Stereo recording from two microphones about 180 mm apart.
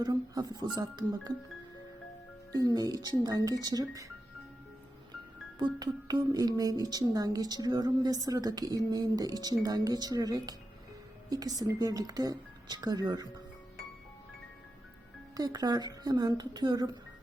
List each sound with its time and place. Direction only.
0.0 s speech: 20° right (ahead or behind)
2.6 s speech: 20° right (ahead or behind)
5.5 s speech: 25° right (ahead or behind)
15.4 s speech: 20° right (ahead or behind)